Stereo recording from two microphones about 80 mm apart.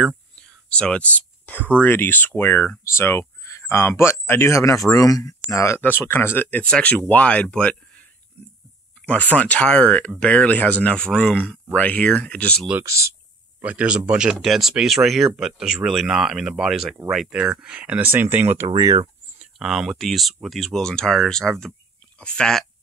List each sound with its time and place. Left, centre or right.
0.4 s whispering: centre
1.8 s speech: left
5.8 s speech: left
6.6 s speech: centre
12.8 s speech: right
13.6 s speech: centre
18.8 s speech: right
19.3 s speech: centre